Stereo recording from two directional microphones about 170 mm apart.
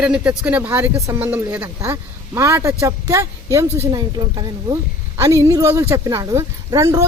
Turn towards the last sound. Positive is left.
turn(degrees=-20)  # may be behind; listen again after turning